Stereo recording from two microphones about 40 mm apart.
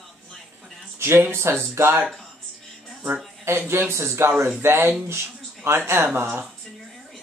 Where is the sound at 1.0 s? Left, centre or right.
Right.